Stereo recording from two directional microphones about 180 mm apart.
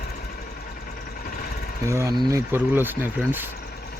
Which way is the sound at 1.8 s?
15° right (ahead or behind).